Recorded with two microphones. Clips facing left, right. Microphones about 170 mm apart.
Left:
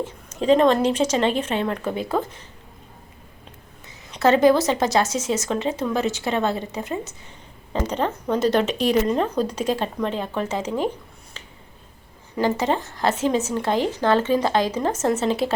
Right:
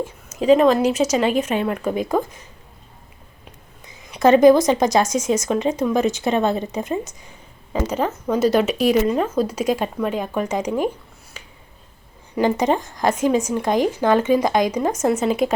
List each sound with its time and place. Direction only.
0.0 s speech: 10° right (ahead or behind)
4.1 s speech: 15° right (ahead or behind)
7.7 s speech: 10° right (ahead or behind)
12.4 s speech: 15° right (ahead or behind)